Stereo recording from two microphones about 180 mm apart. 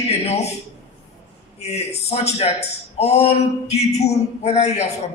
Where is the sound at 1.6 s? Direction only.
35° left (ahead or behind).